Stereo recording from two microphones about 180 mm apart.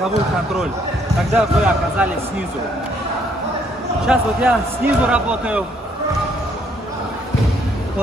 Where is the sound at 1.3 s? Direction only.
5° right (ahead or behind).